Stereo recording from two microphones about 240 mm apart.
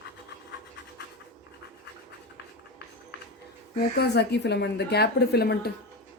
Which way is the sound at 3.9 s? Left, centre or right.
Left.